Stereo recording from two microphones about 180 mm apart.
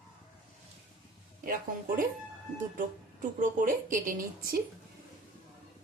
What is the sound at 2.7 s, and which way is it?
A woman's voice, 50° right (ahead or behind).